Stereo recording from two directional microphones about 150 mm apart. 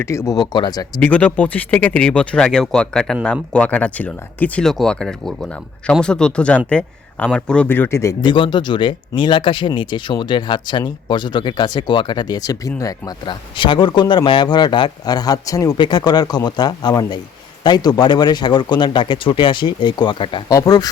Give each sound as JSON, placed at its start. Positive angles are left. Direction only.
{"t": 0.0, "sound": "speech", "side_deg": 20}
{"t": 0.9, "sound": "speech", "side_deg": 10}
{"t": 8.2, "sound": "speech", "side_deg": 30}
{"t": 20.5, "sound": "speech", "side_deg": 25}